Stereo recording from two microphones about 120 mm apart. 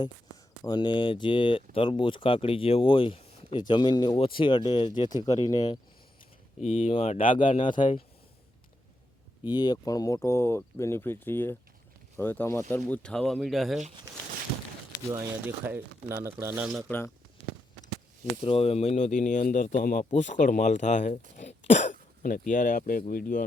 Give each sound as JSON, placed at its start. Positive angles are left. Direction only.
{"t": 0.6, "sound": "speech", "side_deg": 35}
{"t": 6.6, "sound": "speech", "side_deg": 90}
{"t": 6.8, "sound": "speech", "side_deg": 55}
{"t": 7.7, "sound": "speech", "side_deg": 90}
{"t": 9.5, "sound": "speech", "side_deg": 35}
{"t": 12.9, "sound": "speech", "side_deg": 5}
{"t": 15.1, "sound": "speech", "side_deg": -25}
{"t": 18.4, "sound": "speech", "side_deg": 55}
{"t": 21.3, "sound": "cough", "side_deg": 80}
{"t": 22.4, "sound": "speech", "side_deg": 90}